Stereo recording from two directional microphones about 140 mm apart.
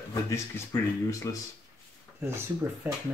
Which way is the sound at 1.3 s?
25° left (ahead or behind).